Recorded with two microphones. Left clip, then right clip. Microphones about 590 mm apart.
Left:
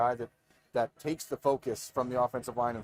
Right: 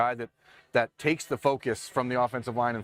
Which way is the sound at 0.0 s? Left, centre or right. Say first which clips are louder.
Right 2 dB; right.